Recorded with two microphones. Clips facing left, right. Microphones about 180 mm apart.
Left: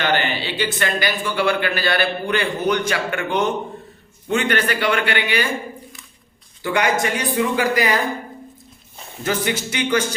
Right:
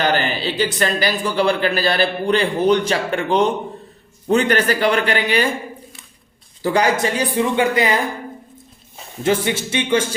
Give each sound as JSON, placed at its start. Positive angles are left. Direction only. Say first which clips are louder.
{"t": 0.0, "sound": "a man's voice", "louder": "right 2 dB", "side_deg": -40}
{"t": 6.6, "sound": "speech", "louder": "right 3 dB", "side_deg": -35}
{"t": 9.2, "sound": "speech", "louder": "right 4 dB", "side_deg": -25}